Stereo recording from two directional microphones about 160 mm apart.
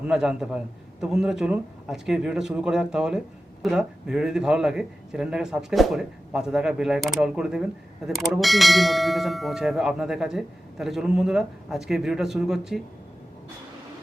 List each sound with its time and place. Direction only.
0.0 s a man's voice: 5° right (ahead or behind)